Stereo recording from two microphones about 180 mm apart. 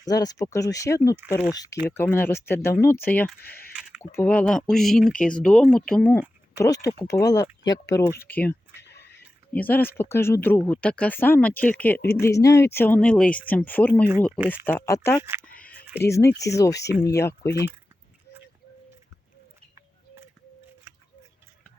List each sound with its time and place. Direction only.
0.0 s speech: 20° left (ahead or behind)
3.8 s drip: 5° right (ahead or behind)
4.0 s speech: 10° left (ahead or behind)
6.6 s speech: 20° left (ahead or behind)
8.2 s speech: 10° left (ahead or behind)
8.9 s a sound: 70° left (ahead or behind)
9.5 s speech: 10° left (ahead or behind)
15.2 s speech: 15° right (ahead or behind)
16.0 s speech: 15° left (ahead or behind)